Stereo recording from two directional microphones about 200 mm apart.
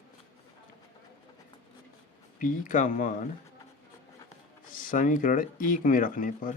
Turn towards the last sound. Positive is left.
turn(degrees=45)  # may be behind; listen again after turning